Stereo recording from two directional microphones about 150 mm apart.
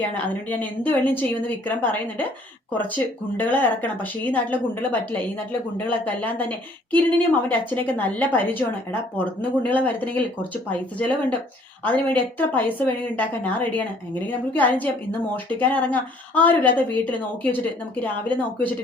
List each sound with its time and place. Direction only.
0.1 s speech: 10° left (ahead or behind)